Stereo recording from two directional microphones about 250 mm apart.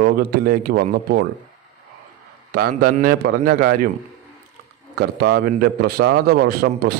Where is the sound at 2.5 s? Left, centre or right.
Right.